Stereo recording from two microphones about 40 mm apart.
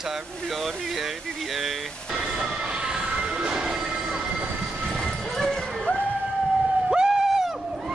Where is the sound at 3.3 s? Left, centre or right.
Right.